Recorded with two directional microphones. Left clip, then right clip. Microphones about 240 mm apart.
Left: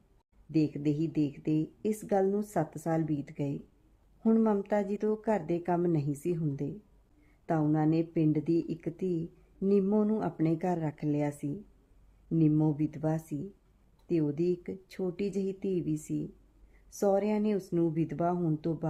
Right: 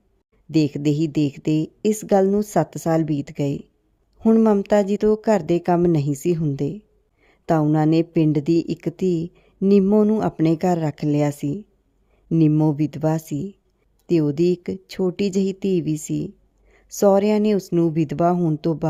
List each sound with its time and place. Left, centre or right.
0.5 s a woman's voice: right